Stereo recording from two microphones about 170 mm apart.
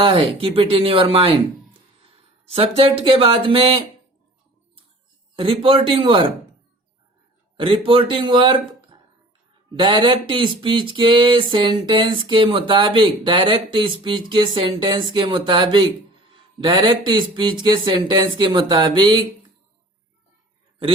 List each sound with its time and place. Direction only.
0.0 s speech: 35° right (ahead or behind)
5.4 s speech: 30° right (ahead or behind)
7.5 s speech: 30° right (ahead or behind)
9.7 s a sound: 30° right (ahead or behind)